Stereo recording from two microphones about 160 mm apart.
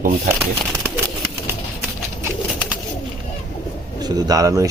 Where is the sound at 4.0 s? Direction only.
20° right (ahead or behind).